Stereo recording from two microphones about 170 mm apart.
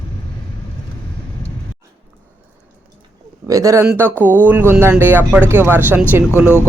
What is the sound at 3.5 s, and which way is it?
Speech, 20° right (ahead or behind).